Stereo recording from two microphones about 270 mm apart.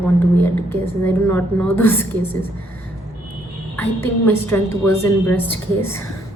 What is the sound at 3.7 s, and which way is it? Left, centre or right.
A woman's voice, centre.